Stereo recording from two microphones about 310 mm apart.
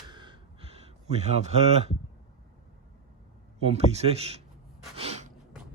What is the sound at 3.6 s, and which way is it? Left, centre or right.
Speech, centre.